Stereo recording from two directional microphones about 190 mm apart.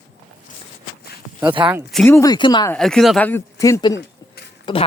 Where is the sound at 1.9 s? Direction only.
10° left (ahead or behind).